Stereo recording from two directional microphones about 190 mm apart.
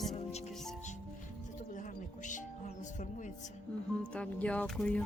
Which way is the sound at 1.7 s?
40° left (ahead or behind).